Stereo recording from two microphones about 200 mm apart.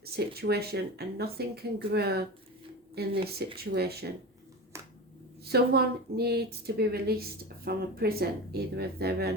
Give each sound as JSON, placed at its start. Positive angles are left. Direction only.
{"t": 0.0, "sound": "a woman's voice", "side_deg": -50}
{"t": 5.5, "sound": "a woman's voice", "side_deg": -55}